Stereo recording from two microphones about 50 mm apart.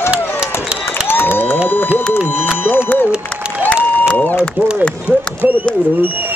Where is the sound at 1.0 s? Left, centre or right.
Left.